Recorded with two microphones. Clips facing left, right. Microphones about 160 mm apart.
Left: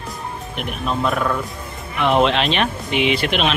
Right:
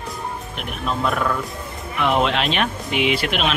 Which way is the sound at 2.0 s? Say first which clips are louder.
Left 3 dB; 5° right (ahead or behind).